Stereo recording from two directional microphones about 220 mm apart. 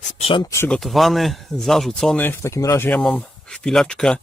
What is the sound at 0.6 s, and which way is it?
Speech, centre (ahead or behind).